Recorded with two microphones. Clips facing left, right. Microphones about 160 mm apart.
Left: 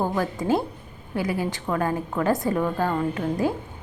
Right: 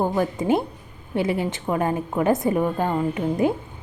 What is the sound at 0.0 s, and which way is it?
A woman's voice, 20° right (ahead or behind).